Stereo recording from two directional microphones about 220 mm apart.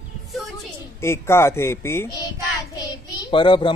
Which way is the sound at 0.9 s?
10° left (ahead or behind).